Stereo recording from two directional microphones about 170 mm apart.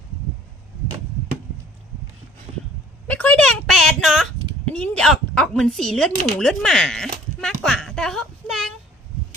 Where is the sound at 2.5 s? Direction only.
40° right (ahead or behind).